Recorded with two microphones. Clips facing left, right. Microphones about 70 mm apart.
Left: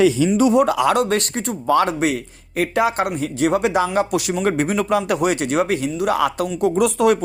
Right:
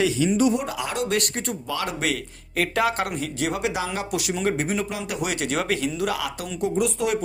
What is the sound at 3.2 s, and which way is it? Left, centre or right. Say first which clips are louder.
Speech: left 8 dB; left.